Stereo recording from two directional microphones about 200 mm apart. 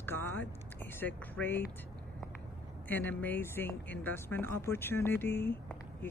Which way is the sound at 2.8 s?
10° left (ahead or behind).